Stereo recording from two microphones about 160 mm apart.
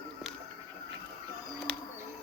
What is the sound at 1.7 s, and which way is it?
Bird, 10° left (ahead or behind).